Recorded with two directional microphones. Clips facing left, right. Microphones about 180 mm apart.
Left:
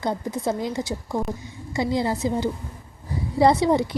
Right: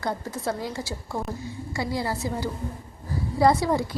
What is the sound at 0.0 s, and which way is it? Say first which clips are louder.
A woman's voice: left 4 dB; 20° left (ahead or behind).